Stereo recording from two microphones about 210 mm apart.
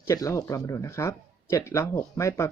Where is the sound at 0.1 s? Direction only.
15° left (ahead or behind).